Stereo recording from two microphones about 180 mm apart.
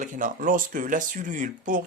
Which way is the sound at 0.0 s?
45° right (ahead or behind).